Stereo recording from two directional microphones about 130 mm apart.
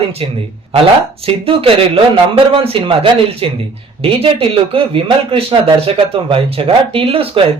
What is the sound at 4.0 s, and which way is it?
Speech, 50° right (ahead or behind).